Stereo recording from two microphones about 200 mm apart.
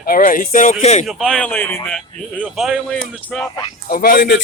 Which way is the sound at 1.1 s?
5° left (ahead or behind).